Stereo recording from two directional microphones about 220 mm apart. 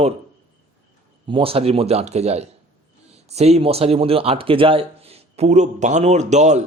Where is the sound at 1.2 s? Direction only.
25° right (ahead or behind).